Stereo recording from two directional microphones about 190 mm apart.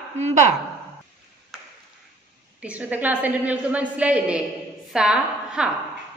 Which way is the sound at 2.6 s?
10° right (ahead or behind).